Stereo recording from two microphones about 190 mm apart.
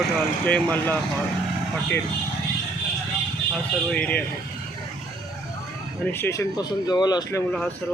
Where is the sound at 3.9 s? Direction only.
5° left (ahead or behind).